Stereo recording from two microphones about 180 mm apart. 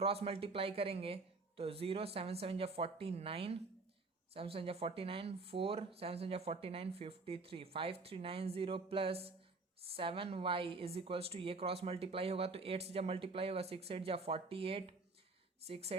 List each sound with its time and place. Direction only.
0.0 s a woman's voice: 30° right (ahead or behind)